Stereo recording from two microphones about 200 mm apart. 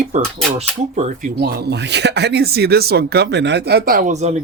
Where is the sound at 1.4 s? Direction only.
50° right (ahead or behind).